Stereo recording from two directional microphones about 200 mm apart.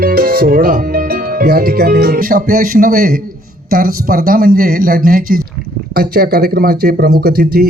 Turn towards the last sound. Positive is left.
turn(degrees=-50)  # may be behind; listen again after turning